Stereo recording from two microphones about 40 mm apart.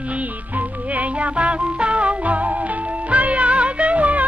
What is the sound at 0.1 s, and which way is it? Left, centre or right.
Music, right.